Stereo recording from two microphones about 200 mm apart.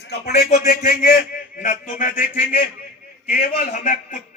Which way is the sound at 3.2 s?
45° left (ahead or behind).